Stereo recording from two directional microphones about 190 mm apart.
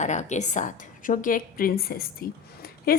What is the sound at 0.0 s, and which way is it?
A woman's voice, 40° left (ahead or behind).